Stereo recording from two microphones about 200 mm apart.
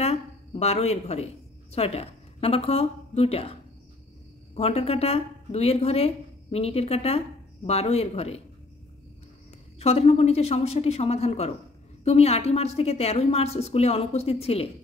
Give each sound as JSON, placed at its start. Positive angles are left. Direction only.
{"t": 0.0, "sound": "a woman's voice", "side_deg": 30}
{"t": 4.6, "sound": "speech", "side_deg": 30}
{"t": 9.8, "sound": "speech", "side_deg": 30}